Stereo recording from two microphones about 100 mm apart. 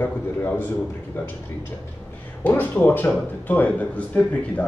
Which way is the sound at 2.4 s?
20° left (ahead or behind).